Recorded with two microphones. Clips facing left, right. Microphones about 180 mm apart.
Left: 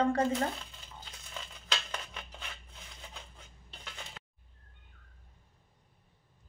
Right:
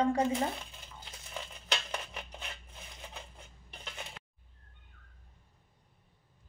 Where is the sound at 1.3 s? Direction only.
15° right (ahead or behind).